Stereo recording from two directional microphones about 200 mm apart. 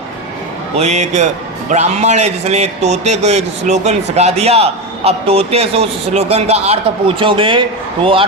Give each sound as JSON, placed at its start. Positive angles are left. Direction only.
{"t": 0.8, "sound": "a man's voice", "side_deg": -35}